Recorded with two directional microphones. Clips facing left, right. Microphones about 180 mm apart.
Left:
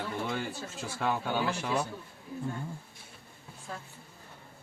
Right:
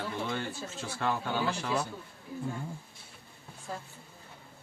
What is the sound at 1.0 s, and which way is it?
Speech, 5° left (ahead or behind).